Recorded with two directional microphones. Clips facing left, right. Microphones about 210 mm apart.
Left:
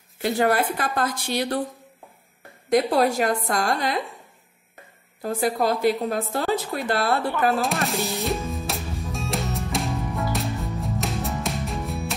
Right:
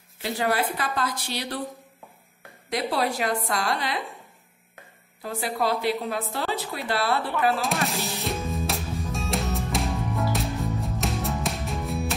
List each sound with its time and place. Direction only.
0.2 s speech: 50° left (ahead or behind)
2.7 s speech: 45° left (ahead or behind)
5.2 s speech: 45° left (ahead or behind)
7.6 s music: centre (ahead or behind)